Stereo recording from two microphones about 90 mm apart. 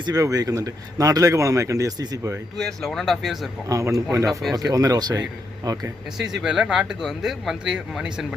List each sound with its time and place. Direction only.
0.0 s speech: 40° right (ahead or behind)
2.6 s speech: 5° left (ahead or behind)
3.7 s speech: 40° right (ahead or behind)
6.1 s speech: 5° right (ahead or behind)